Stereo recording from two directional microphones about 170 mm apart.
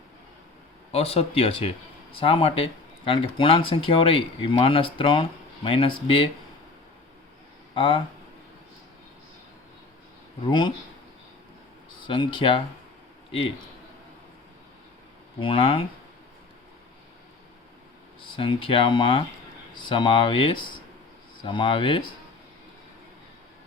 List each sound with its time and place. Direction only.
0.9 s speech: 35° left (ahead or behind)
7.7 s speech: 30° left (ahead or behind)
10.4 s speech: 25° left (ahead or behind)
12.0 s speech: 30° left (ahead or behind)
15.4 s speech: 30° left (ahead or behind)
18.2 s speech: 30° left (ahead or behind)